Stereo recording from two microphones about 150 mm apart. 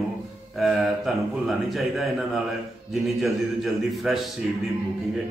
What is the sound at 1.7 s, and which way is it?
A man's voice, centre (ahead or behind).